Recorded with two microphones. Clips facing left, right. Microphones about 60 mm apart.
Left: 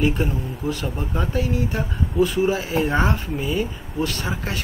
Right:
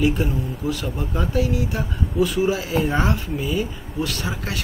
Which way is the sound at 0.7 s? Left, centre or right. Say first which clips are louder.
Even; centre.